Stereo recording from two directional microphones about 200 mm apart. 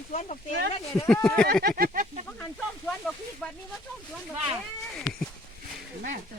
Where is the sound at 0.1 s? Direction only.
30° left (ahead or behind).